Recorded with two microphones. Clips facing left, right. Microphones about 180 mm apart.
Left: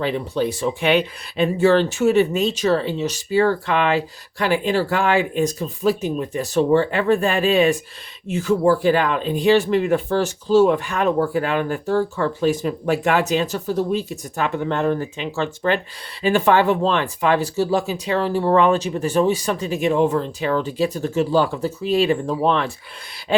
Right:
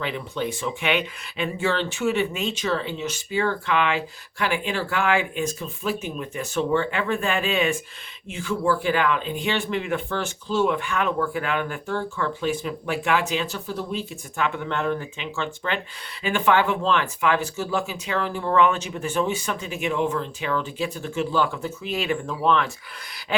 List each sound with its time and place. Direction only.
0.0 s speech: 35° left (ahead or behind)